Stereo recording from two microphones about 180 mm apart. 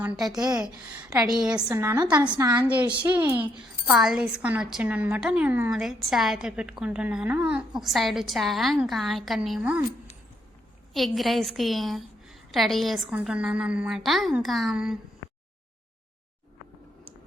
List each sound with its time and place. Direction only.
1.3 s a woman's voice: 5° right (ahead or behind)
1.7 s a woman's voice: 15° right (ahead or behind)
2.2 s a woman's voice: 25° right (ahead or behind)
2.6 s a woman's voice: 10° right (ahead or behind)
10.9 s a woman's voice: centre (ahead or behind)